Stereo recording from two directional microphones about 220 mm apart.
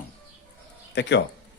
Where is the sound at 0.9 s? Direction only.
50° left (ahead or behind).